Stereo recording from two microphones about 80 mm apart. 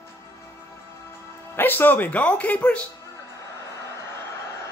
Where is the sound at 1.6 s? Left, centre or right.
Left.